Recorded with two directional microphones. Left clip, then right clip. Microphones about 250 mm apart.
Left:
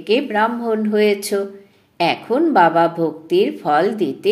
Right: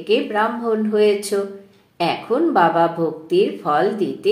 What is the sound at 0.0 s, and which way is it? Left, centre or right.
Speech, left.